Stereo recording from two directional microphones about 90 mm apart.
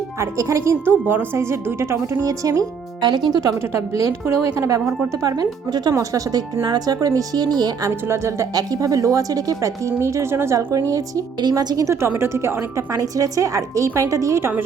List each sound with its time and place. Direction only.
0.2 s a woman's voice: 35° right (ahead or behind)
3.0 s speech: 55° right (ahead or behind)
3.9 s a woman's voice: 40° right (ahead or behind)
6.6 s speech: 50° right (ahead or behind)
7.9 s a woman's voice: 30° right (ahead or behind)
8.5 s a woman's voice: 45° right (ahead or behind)
11.9 s a woman's voice: 30° right (ahead or behind)